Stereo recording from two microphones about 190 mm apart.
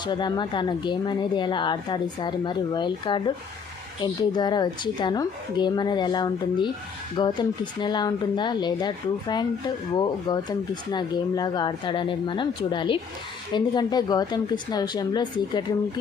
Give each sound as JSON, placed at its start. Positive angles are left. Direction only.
{"t": 0.0, "sound": "speech", "side_deg": 25}